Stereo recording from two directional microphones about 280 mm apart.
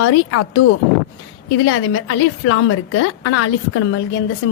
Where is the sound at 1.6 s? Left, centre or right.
Left.